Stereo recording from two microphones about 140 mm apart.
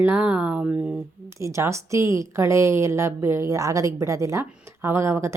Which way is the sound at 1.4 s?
20° right (ahead or behind).